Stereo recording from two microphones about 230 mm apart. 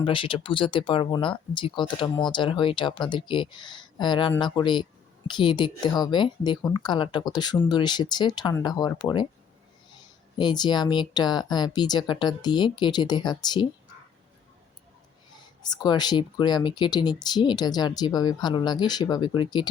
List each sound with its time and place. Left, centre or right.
0.0 s speech: left
10.3 s speech: centre
15.4 s speech: centre